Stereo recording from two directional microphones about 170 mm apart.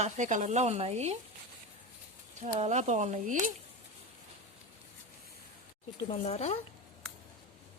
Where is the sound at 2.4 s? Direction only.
45° right (ahead or behind).